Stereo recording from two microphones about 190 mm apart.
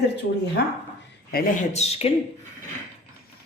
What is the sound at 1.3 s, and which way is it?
Speech, 50° left (ahead or behind).